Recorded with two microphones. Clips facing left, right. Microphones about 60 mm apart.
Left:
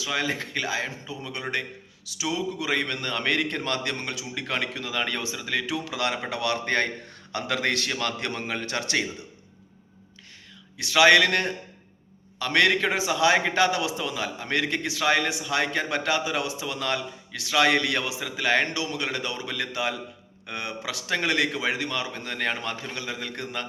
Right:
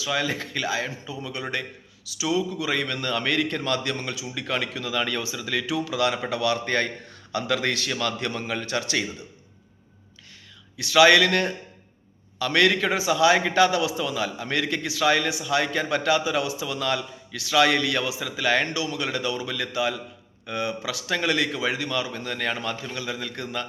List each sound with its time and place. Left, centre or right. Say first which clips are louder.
0.1 s a man's voice: right 2 dB; left
7.9 s a man's voice: right 1 dB; left
8.2 s speech: right 1 dB; left
11.1 s a man's voice: even; left
21.3 s a man's voice: even; left